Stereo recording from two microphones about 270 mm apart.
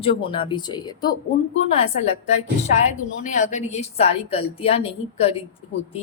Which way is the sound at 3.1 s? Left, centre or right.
Left.